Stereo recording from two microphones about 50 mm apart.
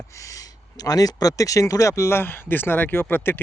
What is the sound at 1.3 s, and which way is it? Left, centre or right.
Speech, left.